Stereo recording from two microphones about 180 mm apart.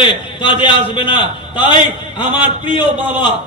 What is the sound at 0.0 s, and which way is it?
A man's voice, 25° left (ahead or behind).